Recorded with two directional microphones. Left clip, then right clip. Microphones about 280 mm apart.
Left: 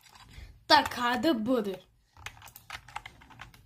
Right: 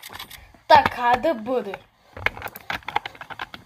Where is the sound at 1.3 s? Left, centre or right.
Left.